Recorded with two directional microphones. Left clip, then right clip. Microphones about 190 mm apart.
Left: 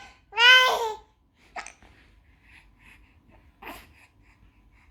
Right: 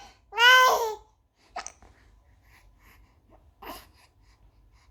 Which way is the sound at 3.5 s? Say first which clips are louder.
Even; 20° right (ahead or behind).